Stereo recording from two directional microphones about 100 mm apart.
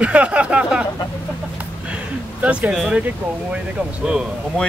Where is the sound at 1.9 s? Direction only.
10° right (ahead or behind).